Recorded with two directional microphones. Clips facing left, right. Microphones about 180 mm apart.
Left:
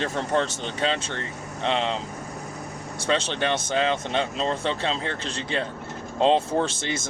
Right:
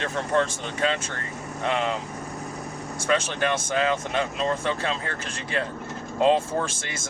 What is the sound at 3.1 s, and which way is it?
Speech, 25° left (ahead or behind).